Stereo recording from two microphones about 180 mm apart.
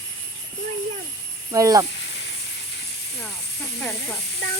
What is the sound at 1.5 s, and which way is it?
Speech, 20° right (ahead or behind).